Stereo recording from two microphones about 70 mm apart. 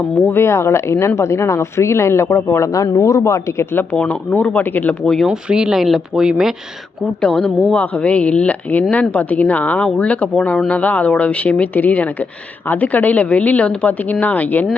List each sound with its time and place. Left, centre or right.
0.3 s speech: left
2.7 s speech: left
3.9 s a woman's voice: centre
5.3 s speech: centre
7.2 s a woman's voice: centre